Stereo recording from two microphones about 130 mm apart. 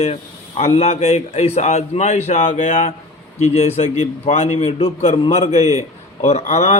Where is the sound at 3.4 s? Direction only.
55° left (ahead or behind).